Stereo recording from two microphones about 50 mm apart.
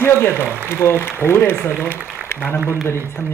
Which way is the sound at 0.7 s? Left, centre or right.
Left.